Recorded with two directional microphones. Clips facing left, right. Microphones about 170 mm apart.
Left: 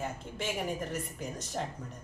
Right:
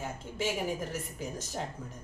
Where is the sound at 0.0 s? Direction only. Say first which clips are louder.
Right 2 dB; centre (ahead or behind).